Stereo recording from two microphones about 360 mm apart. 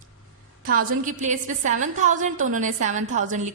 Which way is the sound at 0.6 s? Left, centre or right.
Right.